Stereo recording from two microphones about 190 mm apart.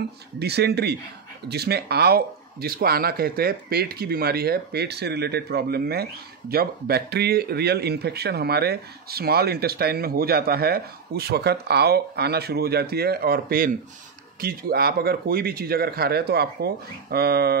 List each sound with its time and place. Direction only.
0.4 s speech: 60° right (ahead or behind)